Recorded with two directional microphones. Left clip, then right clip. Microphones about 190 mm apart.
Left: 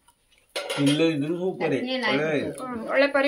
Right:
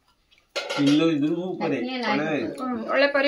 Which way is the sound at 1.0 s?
60° left (ahead or behind).